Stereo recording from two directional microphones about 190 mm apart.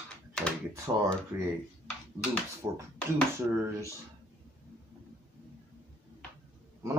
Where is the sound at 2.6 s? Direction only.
15° right (ahead or behind).